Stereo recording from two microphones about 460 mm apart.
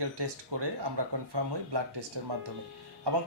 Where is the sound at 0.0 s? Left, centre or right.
Right.